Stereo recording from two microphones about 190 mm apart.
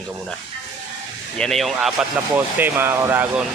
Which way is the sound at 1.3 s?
Centre (ahead or behind).